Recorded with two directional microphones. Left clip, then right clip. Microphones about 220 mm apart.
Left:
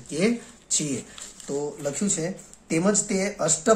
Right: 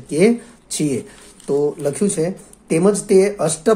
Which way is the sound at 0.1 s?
30° right (ahead or behind).